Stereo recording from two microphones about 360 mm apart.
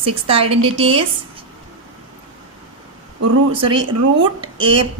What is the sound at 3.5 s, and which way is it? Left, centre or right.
Speech, centre.